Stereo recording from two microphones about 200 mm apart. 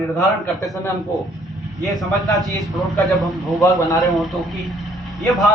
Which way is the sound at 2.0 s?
Centre (ahead or behind).